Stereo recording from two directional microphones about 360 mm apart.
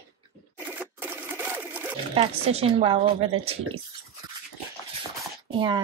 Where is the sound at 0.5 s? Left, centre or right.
Centre.